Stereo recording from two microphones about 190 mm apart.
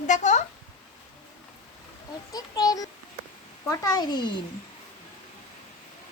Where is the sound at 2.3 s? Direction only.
20° left (ahead or behind).